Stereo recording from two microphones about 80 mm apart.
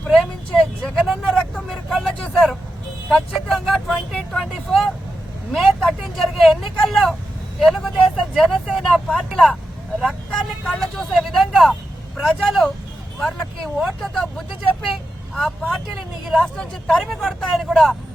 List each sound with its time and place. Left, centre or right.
0.0 s vehicle: centre
3.1 s speech: centre
10.7 s speech: centre
17.1 s speech: centre